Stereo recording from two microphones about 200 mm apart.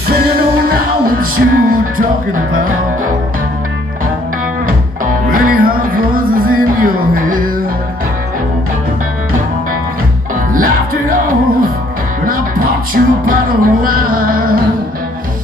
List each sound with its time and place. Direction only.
0.7 s music: 45° right (ahead or behind)
5.3 s music: 45° right (ahead or behind)
10.5 s music: 45° right (ahead or behind)